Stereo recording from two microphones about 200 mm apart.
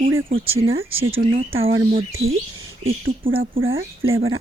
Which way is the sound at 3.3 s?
80° right.